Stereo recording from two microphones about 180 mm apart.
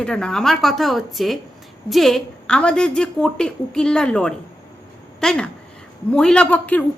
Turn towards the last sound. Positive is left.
turn(degrees=10)  # may be behind; listen again after turning